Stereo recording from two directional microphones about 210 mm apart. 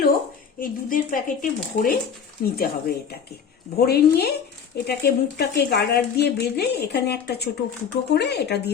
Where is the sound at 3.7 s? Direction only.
50° left (ahead or behind).